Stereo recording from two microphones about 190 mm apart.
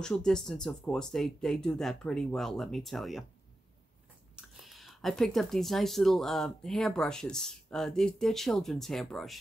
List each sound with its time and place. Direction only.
0.0 s speech: 5° left (ahead or behind)
4.4 s speech: centre (ahead or behind)